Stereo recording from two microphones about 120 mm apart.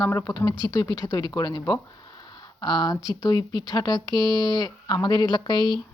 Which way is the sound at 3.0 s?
30° left (ahead or behind).